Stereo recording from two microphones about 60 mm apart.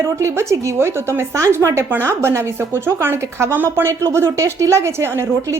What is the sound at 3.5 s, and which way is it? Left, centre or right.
Speech, right.